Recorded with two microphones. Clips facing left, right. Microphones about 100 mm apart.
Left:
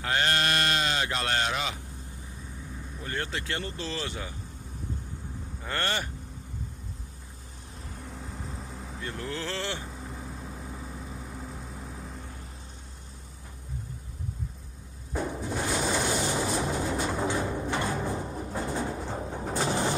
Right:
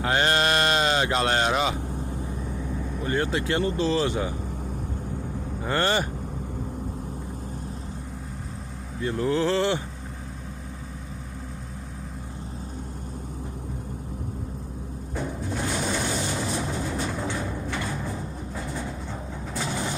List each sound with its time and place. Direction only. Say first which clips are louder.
0.0 s speech: right 5 dB; 25° right (ahead or behind)
3.1 s speech: right 8 dB; 15° right (ahead or behind)
5.7 s speech: right 7 dB; 20° right (ahead or behind)
9.0 s speech: right 11 dB; 25° right (ahead or behind)
15.1 s music: even; 5° left (ahead or behind)
16.8 s vehicle: even; 15° left (ahead or behind)
17.6 s music: left 1 dB; 25° left (ahead or behind)
17.9 s timpani: left 1 dB; 25° left (ahead or behind)
19.4 s vehicle: left 3 dB; 35° left (ahead or behind)